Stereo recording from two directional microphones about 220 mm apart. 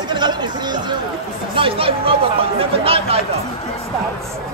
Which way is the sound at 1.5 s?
25° right (ahead or behind).